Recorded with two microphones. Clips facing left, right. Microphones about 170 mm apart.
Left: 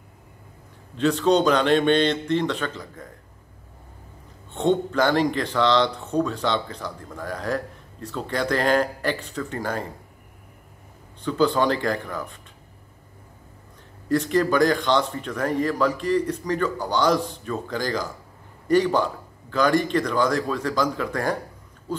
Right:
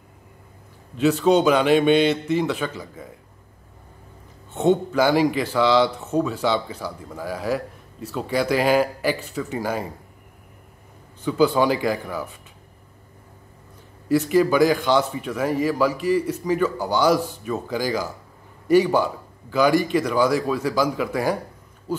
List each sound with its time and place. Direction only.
0.9 s speech: 10° right (ahead or behind)
4.6 s speech: 10° right (ahead or behind)
11.2 s speech: 10° right (ahead or behind)
14.0 s speech: 10° right (ahead or behind)